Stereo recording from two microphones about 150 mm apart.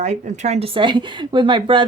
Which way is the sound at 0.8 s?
30° right (ahead or behind).